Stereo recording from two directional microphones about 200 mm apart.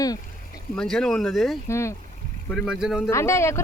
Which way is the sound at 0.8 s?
5° left (ahead or behind).